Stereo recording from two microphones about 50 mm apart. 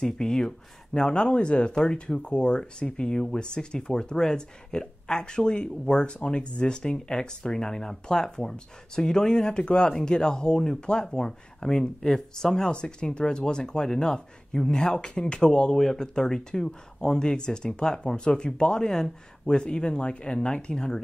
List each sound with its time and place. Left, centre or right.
0.0 s speech: centre